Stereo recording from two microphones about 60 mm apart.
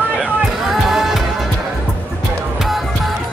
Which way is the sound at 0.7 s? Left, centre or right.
Centre.